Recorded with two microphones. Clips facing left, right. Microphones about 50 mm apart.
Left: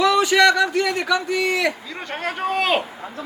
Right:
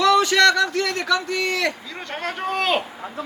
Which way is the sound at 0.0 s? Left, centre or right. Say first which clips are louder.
Even; centre.